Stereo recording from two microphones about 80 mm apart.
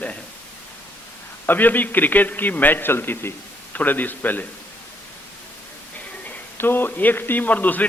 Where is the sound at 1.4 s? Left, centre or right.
Left.